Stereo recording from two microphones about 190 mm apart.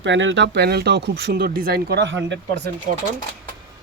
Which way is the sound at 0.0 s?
75° right (ahead or behind).